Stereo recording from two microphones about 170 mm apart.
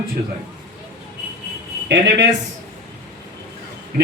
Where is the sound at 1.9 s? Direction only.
90° right.